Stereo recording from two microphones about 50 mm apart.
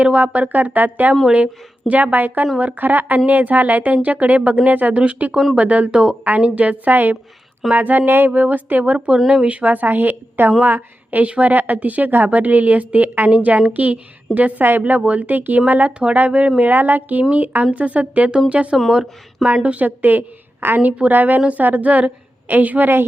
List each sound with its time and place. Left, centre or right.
0.0 s a woman's voice: right
4.9 s speech: right
5.9 s speech: centre
6.2 s a woman's voice: right
8.3 s a woman's voice: right
9.0 s a woman's voice: centre
18.9 s speech: centre
19.6 s a woman's voice: right